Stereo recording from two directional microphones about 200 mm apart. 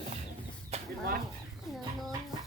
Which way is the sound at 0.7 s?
30° right (ahead or behind).